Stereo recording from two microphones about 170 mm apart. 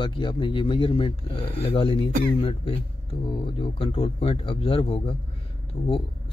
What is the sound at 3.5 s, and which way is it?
Speech, 30° left (ahead or behind).